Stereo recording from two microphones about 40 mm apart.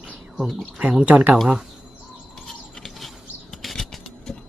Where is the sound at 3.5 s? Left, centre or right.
Centre.